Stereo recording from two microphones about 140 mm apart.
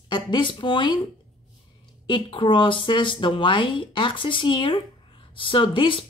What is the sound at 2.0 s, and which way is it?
Speech, 35° left (ahead or behind).